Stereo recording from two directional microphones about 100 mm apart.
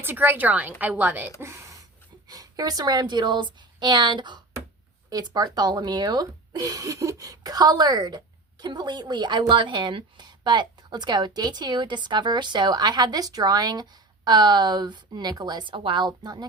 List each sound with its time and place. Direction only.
0.0 s a woman's voice: 20° right (ahead or behind)
2.2 s a woman's voice: 40° right (ahead or behind)